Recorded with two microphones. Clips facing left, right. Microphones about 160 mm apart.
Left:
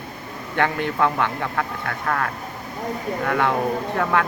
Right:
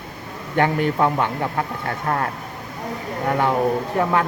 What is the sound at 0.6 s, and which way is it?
Speech, 20° right (ahead or behind).